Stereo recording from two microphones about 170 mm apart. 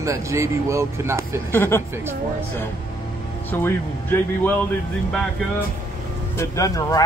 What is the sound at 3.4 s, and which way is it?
A man's voice, 10° left (ahead or behind).